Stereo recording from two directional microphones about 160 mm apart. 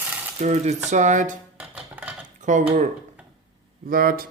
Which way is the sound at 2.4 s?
50° right (ahead or behind).